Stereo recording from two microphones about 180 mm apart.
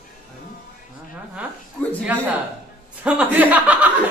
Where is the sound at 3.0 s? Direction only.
10° right (ahead or behind).